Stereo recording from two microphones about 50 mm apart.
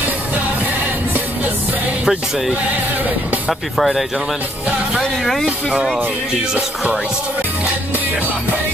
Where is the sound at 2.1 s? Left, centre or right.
Centre.